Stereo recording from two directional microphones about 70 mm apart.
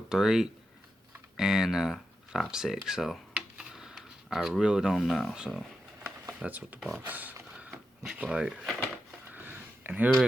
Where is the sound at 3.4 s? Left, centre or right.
Centre.